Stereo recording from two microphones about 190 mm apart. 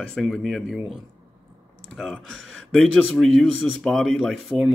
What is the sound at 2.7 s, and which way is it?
A man's voice, centre (ahead or behind).